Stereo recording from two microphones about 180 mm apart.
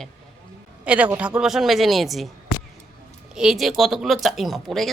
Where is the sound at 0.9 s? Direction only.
10° right (ahead or behind).